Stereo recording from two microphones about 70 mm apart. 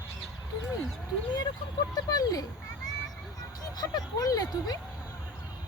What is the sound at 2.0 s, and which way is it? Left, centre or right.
Speech, left.